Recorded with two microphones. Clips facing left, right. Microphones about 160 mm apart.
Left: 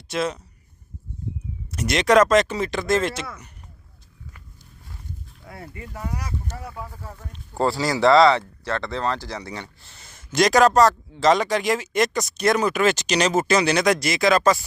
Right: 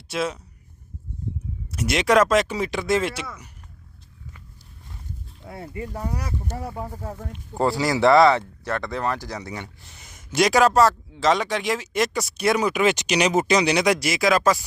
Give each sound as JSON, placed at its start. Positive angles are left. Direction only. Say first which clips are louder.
{"t": 0.1, "sound": "speech", "louder": "left 1 dB", "side_deg": -5}
{"t": 1.7, "sound": "speech", "louder": "left 2 dB", "side_deg": -5}
{"t": 5.4, "sound": "speech", "louder": "right 6 dB", "side_deg": -25}
{"t": 7.3, "sound": "speech", "louder": "even", "side_deg": -20}